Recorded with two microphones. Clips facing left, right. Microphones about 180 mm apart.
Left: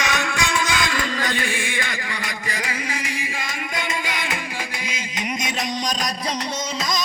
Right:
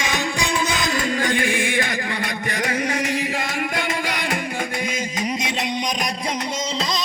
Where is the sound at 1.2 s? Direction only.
55° right (ahead or behind).